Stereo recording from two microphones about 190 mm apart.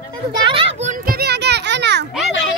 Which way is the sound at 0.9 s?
55° right (ahead or behind).